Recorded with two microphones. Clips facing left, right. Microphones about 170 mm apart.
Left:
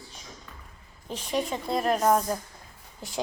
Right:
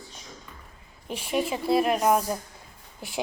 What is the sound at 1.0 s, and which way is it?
Speech, 10° right (ahead or behind).